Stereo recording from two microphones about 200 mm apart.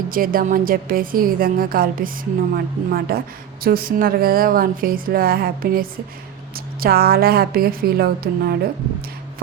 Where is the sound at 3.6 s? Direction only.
45° right (ahead or behind).